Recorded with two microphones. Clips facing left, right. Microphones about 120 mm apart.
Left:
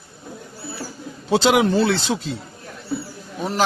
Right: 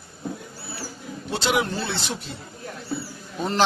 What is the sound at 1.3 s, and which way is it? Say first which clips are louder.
Speech: left 8 dB; 90° left.